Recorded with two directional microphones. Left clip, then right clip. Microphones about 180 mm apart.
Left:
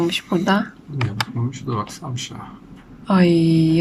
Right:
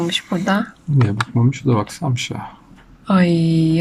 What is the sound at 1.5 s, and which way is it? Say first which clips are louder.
Speech: right 6 dB; 50° right (ahead or behind).